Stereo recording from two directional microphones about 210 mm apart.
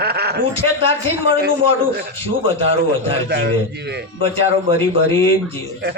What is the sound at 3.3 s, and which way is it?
Speech, 50° right (ahead or behind).